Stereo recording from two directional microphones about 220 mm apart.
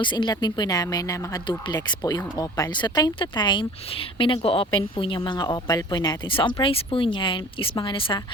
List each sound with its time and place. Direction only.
0.0 s speech: 20° left (ahead or behind)